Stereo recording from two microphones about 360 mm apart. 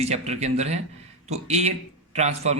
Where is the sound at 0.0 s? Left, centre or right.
Centre.